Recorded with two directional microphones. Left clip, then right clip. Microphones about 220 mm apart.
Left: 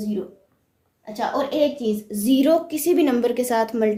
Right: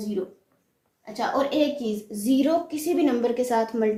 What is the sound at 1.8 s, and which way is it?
A woman's voice, 45° left (ahead or behind).